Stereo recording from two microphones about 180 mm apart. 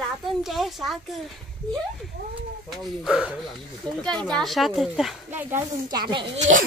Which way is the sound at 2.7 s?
Centre (ahead or behind).